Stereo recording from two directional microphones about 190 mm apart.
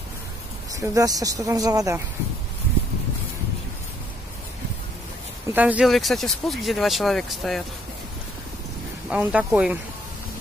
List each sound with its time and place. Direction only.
0.7 s speech: 15° right (ahead or behind)
5.5 s speech: 10° right (ahead or behind)
9.1 s speech: 5° right (ahead or behind)